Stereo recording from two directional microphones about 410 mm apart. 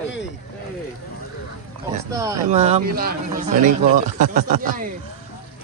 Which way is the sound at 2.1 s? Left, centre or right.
Centre.